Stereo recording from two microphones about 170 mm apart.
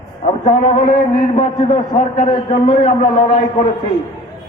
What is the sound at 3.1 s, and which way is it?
Speech, 30° left (ahead or behind).